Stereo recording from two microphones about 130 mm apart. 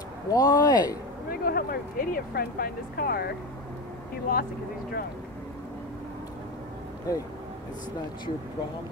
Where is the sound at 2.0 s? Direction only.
90° left.